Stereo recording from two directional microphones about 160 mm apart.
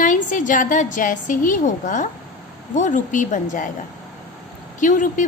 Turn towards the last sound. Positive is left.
turn(degrees=55)  # may be behind; listen again after turning